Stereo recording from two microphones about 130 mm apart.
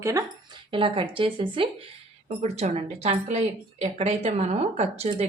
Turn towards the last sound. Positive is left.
turn(degrees=-55)  # may be behind; listen again after turning